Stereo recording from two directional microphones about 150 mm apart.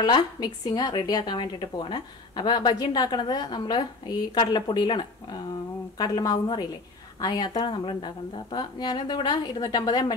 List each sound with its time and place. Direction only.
0.0 s speech: 25° left (ahead or behind)